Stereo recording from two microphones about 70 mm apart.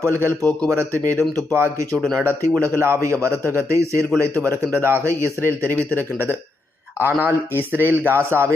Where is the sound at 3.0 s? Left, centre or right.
Right.